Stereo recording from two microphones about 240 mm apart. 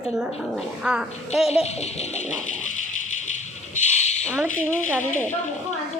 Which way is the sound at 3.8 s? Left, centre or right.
Left.